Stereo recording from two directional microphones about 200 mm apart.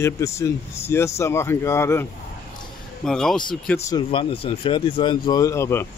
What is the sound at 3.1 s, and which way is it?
Speech, 5° left (ahead or behind).